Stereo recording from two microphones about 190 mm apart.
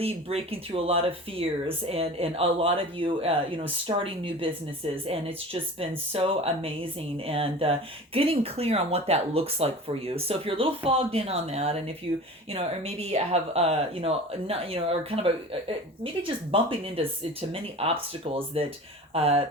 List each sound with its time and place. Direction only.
0.0 s speech: 30° right (ahead or behind)
6.1 s speech: 30° right (ahead or behind)